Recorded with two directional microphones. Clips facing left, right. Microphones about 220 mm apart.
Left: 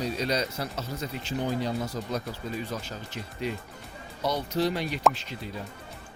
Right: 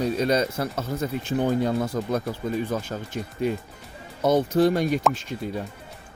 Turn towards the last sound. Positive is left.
turn(degrees=-45)  # may be behind; listen again after turning